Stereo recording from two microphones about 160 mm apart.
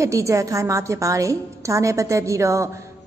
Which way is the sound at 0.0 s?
20° right (ahead or behind).